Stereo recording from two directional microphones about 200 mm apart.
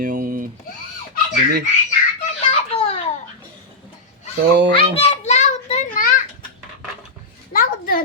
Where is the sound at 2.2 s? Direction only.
30° left (ahead or behind).